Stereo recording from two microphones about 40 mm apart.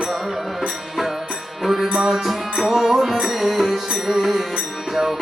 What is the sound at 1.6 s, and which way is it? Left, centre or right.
Music, centre.